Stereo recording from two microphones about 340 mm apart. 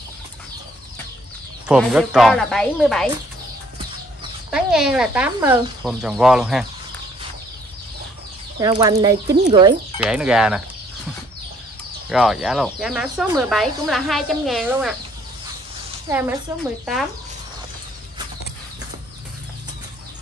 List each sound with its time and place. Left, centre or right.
1.7 s speech: centre
4.5 s speech: centre
8.5 s speech: centre
9.9 s speech: centre
12.1 s speech: centre
16.1 s speech: centre